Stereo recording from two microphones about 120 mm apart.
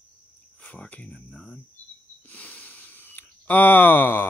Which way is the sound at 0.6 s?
15° left (ahead or behind).